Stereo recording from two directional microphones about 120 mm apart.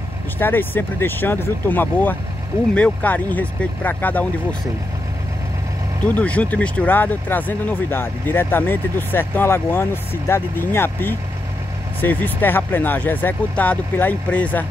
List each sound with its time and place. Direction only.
0.4 s speech: 15° left (ahead or behind)
6.0 s speech: 10° left (ahead or behind)